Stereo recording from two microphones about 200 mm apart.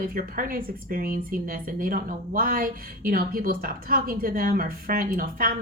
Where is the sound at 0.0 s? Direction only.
45° right (ahead or behind).